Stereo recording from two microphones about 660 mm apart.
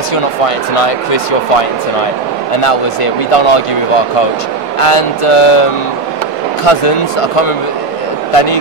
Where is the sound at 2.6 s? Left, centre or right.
Left.